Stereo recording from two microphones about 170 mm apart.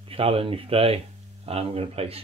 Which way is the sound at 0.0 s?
35° right (ahead or behind).